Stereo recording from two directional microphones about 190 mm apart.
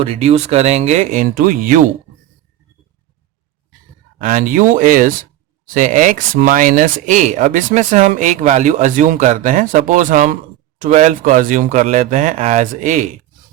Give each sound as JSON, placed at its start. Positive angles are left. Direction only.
{"t": 0.0, "sound": "speech", "side_deg": -30}
{"t": 4.2, "sound": "speech", "side_deg": -40}